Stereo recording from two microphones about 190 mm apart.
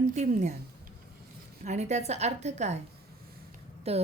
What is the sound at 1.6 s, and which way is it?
A woman's voice, 35° right (ahead or behind).